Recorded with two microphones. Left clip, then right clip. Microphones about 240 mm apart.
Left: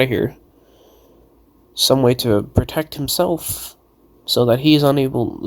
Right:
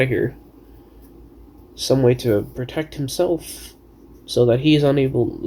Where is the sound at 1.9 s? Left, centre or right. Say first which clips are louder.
Left 1 dB; left.